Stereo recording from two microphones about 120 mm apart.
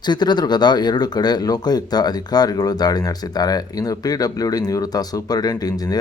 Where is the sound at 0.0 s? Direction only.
35° left (ahead or behind).